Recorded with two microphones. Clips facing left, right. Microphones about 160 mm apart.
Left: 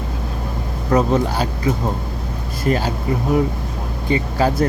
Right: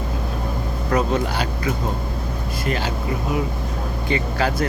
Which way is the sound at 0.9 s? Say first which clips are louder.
Left 4 dB; 30° left (ahead or behind).